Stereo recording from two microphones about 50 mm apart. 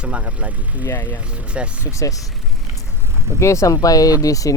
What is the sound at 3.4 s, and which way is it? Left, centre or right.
Speech, left.